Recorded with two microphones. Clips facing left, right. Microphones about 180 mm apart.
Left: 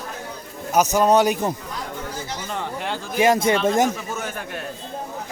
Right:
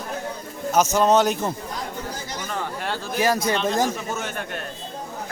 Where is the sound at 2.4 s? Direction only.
20° left (ahead or behind).